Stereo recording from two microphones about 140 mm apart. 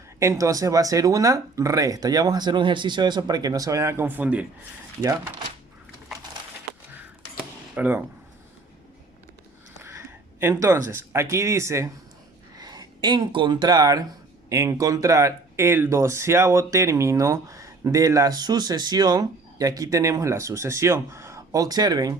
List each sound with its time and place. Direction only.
0.2 s speech: 20° right (ahead or behind)
7.8 s speech: 15° right (ahead or behind)
10.4 s speech: 20° right (ahead or behind)